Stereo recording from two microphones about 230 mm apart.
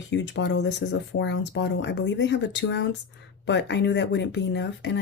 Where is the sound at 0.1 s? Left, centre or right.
Left.